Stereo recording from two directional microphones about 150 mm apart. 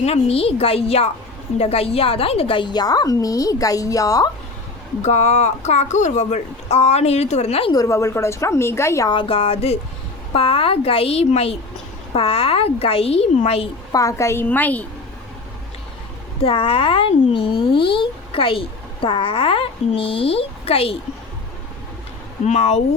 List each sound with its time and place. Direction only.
0.0 s speech: 45° left (ahead or behind); by 4.3 s 20° left (ahead or behind)
5.0 s speech: 50° left (ahead or behind)
7.7 s speech: 20° left (ahead or behind)
9.0 s speech: 35° left (ahead or behind)
13.9 s a woman's voice: 20° left (ahead or behind)
16.4 s speech: 35° left (ahead or behind)
22.4 s speech: 50° left (ahead or behind)